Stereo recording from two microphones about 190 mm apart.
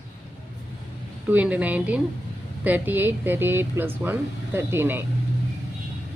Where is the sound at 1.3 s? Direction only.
10° right (ahead or behind).